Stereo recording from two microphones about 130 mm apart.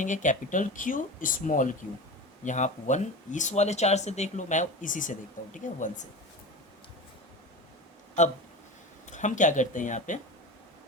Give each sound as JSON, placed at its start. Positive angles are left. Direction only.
{"t": 0.0, "sound": "speech", "side_deg": 75}
{"t": 2.4, "sound": "speech", "side_deg": 70}
{"t": 5.5, "sound": "speech", "side_deg": 75}
{"t": 9.0, "sound": "speech", "side_deg": 70}